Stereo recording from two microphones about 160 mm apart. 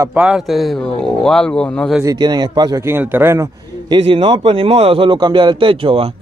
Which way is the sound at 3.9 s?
35° right (ahead or behind).